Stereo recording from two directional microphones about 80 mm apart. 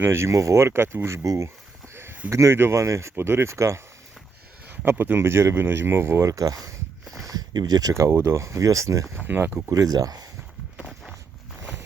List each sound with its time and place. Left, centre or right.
0.0 s speech: right
1.2 s speech: right
1.9 s a sound: right
2.3 s speech: right
4.6 s speech: right
6.3 s speech: right
7.0 s a sound: centre
7.3 s speech: right
9.2 s speech: right
9.6 s speech: right